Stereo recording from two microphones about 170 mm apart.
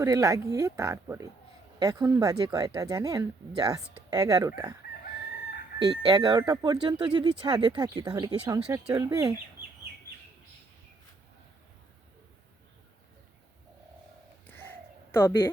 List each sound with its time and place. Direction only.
0.0 s speech: 20° right (ahead or behind)
6.1 s speech: 25° right (ahead or behind)
15.1 s speech: 15° left (ahead or behind)